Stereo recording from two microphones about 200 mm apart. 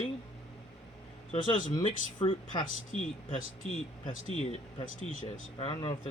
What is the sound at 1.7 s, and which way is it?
Speech, 25° left (ahead or behind).